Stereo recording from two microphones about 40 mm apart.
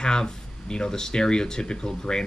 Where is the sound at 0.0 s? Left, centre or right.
Centre.